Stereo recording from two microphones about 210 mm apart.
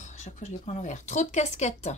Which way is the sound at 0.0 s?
35° left (ahead or behind).